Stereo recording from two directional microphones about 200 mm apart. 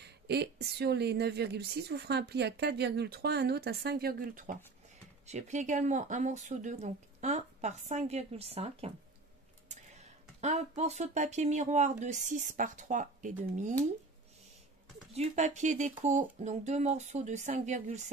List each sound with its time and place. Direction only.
0.0 s a woman's voice: 55° right (ahead or behind); by 8.9 s 30° right (ahead or behind)
10.4 s speech: 35° right (ahead or behind)
15.1 s speech: 35° right (ahead or behind)